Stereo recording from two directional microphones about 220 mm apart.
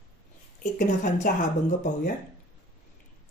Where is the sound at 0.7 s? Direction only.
35° left (ahead or behind).